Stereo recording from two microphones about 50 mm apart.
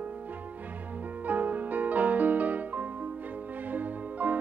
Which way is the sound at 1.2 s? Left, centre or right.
Right.